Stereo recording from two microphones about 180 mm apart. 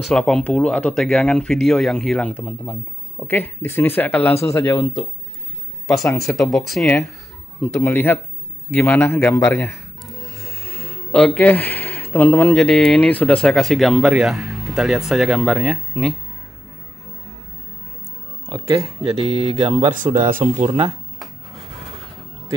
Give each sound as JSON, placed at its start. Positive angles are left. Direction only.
{"t": 0.0, "sound": "speech", "side_deg": 5}
{"t": 6.1, "sound": "speech", "side_deg": 0}
{"t": 7.6, "sound": "speech", "side_deg": 15}
{"t": 10.0, "sound": "music", "side_deg": 0}
{"t": 10.4, "sound": "a sound", "side_deg": 15}
{"t": 12.5, "sound": "speech", "side_deg": 5}
{"t": 18.5, "sound": "speech", "side_deg": -20}
{"t": 18.9, "sound": "speech", "side_deg": -35}
{"t": 20.0, "sound": "speech", "side_deg": -45}